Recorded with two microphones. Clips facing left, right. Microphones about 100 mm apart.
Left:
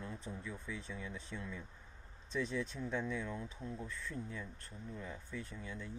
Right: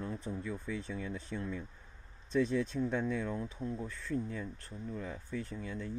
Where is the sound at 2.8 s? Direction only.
50° right (ahead or behind).